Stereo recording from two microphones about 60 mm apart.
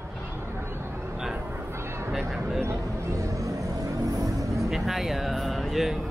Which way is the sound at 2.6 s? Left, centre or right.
Right.